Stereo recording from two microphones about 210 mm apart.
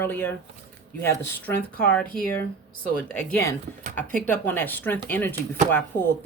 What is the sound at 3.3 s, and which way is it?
Speech, 10° left (ahead or behind).